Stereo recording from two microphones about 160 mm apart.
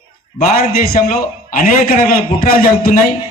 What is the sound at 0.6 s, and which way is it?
A man's voice, 65° left (ahead or behind).